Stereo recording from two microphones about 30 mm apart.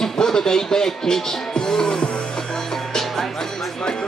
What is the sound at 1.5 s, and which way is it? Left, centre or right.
Music, left.